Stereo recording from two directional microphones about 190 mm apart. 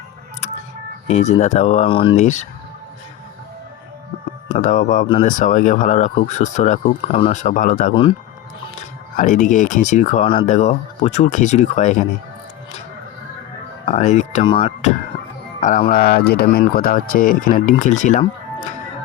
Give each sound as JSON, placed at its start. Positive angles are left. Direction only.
{"t": 1.0, "sound": "speech", "side_deg": 35}
{"t": 4.5, "sound": "speech", "side_deg": 40}
{"t": 9.1, "sound": "speech", "side_deg": 40}
{"t": 13.8, "sound": "speech", "side_deg": 35}
{"t": 14.4, "sound": "speech", "side_deg": 25}
{"t": 15.9, "sound": "speech", "side_deg": 55}